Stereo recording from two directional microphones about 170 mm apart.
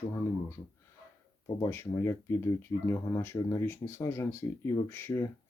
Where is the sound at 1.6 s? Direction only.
15° left (ahead or behind).